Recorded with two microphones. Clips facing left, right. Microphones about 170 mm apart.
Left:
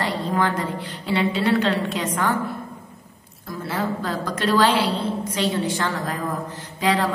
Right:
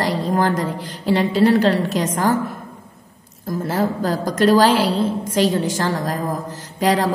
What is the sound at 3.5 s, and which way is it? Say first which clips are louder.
A woman's voice: right 5 dB; 40° right (ahead or behind).